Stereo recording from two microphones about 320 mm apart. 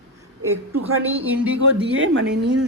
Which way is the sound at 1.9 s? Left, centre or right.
Right.